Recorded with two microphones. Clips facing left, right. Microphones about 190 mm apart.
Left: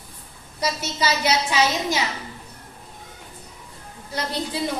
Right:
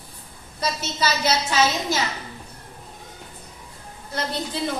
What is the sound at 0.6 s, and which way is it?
A woman's voice, 15° left (ahead or behind).